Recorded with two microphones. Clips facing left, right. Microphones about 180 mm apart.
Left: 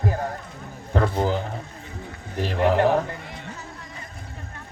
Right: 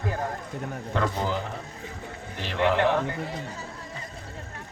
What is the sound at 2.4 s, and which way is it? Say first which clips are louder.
Speech: left 3 dB; 40° left (ahead or behind).